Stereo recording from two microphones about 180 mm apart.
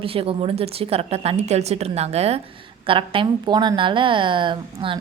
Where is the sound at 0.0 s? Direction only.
30° right (ahead or behind).